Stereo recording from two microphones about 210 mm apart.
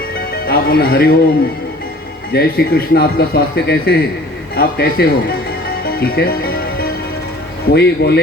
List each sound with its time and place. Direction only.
0.3 s speech: 45° left (ahead or behind)
2.3 s speech: 50° left (ahead or behind)
5.8 s music: 45° left (ahead or behind)
7.7 s speech: 50° left (ahead or behind)